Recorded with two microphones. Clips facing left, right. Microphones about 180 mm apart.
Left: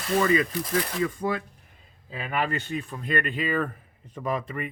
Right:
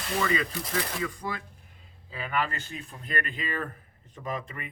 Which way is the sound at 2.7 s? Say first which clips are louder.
Left 8 dB; 65° left (ahead or behind).